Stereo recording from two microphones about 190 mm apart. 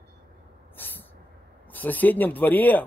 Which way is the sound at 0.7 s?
10° left (ahead or behind).